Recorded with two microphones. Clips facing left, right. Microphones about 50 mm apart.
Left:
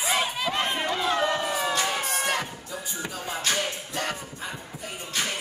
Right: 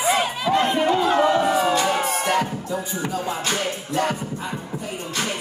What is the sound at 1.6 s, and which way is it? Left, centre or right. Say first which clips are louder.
Music: right 7 dB; right.